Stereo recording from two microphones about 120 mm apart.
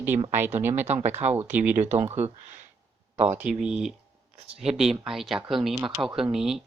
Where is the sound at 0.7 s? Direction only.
75° right (ahead or behind).